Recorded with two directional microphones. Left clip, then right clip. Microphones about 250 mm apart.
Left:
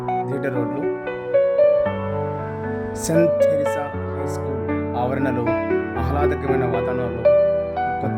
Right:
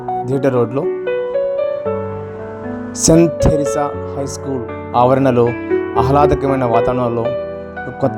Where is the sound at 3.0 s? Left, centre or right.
Right.